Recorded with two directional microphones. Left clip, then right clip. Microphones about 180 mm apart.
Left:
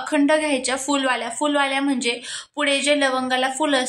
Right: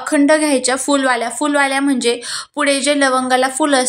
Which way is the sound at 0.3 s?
30° right (ahead or behind).